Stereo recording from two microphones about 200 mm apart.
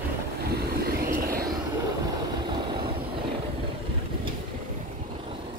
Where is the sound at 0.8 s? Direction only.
45° right (ahead or behind).